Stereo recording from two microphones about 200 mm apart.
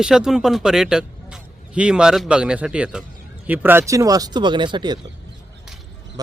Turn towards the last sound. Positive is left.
turn(degrees=-20)  # may be behind; listen again after turning